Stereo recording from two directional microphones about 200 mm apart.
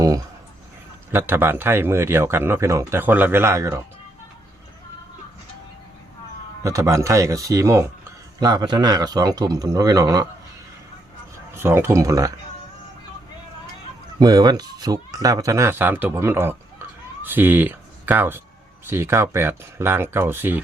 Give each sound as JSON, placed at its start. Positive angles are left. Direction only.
{"t": 0.0, "sound": "a sound", "side_deg": -20}
{"t": 1.1, "sound": "speech", "side_deg": -10}
{"t": 6.6, "sound": "a man's voice", "side_deg": -15}
{"t": 11.5, "sound": "speech", "side_deg": -10}
{"t": 14.2, "sound": "speech", "side_deg": -20}